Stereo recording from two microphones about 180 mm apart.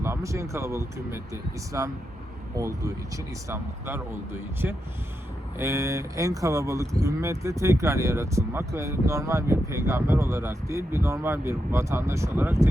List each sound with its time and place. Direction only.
0.0 s speech: 15° right (ahead or behind)